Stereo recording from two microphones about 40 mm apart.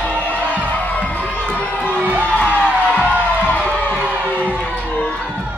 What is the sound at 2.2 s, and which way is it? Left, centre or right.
Music, left.